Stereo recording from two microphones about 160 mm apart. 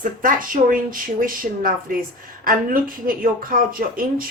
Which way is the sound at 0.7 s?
60° right (ahead or behind).